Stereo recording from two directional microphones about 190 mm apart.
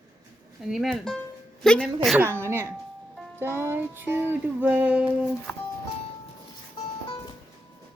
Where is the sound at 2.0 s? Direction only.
5° right (ahead or behind).